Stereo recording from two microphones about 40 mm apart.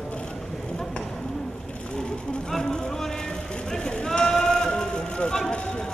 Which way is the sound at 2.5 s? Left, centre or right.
Centre.